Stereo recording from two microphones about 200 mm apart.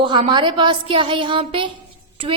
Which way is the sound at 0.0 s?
25° right (ahead or behind).